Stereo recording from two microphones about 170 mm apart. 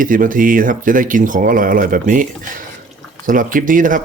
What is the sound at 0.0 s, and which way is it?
Speech, 55° right (ahead or behind).